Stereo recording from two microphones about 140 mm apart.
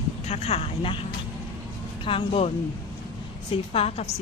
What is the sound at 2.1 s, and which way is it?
Speech, 40° left (ahead or behind).